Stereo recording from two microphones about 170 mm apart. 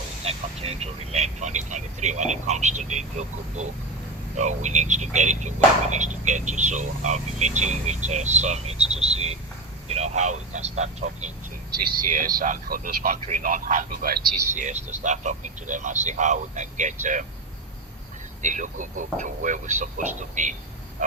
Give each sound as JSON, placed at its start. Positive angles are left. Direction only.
{"t": 0.3, "sound": "speech", "side_deg": -35}
{"t": 11.9, "sound": "speech", "side_deg": -55}
{"t": 14.5, "sound": "speech", "side_deg": -45}
{"t": 18.4, "sound": "speech", "side_deg": -50}